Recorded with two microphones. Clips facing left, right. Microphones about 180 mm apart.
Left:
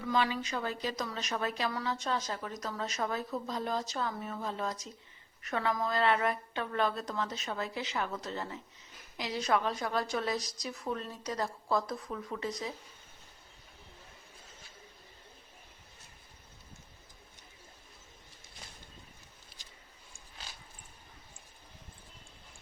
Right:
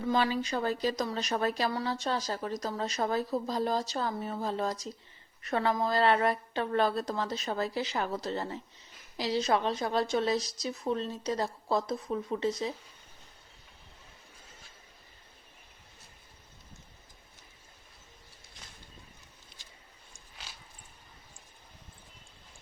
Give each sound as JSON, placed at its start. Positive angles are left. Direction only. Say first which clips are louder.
{"t": 0.1, "sound": "a woman's voice", "louder": "right 2 dB", "side_deg": -35}